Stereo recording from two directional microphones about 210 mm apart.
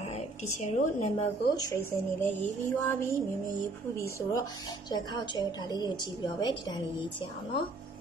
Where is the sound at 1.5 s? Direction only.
15° left (ahead or behind).